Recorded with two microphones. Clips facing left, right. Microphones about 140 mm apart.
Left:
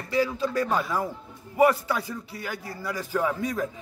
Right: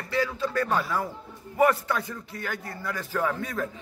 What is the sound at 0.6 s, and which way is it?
Speech, centre (ahead or behind).